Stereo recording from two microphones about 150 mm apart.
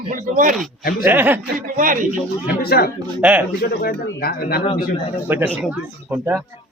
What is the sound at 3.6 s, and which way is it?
Speech, 90° left.